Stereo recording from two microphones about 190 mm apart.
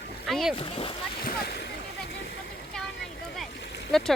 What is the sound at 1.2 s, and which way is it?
Speech, 50° left (ahead or behind).